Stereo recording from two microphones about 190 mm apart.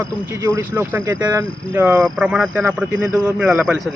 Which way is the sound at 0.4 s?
15° right (ahead or behind).